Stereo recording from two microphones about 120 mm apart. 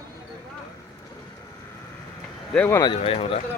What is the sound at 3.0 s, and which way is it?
Speech, 55° left (ahead or behind).